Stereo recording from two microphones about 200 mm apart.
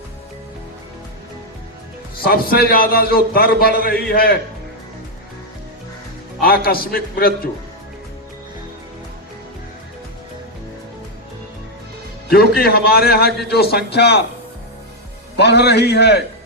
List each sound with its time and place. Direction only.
2.1 s a man's voice: 50° left (ahead or behind)
6.4 s a man's voice: 50° left (ahead or behind)
12.3 s a man's voice: 50° left (ahead or behind)
15.4 s a man's voice: 55° left (ahead or behind)